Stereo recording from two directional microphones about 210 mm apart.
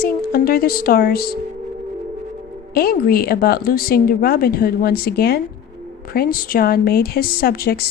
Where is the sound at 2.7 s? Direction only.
45° left (ahead or behind).